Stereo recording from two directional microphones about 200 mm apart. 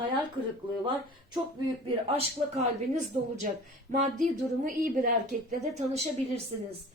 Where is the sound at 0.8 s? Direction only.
20° right (ahead or behind).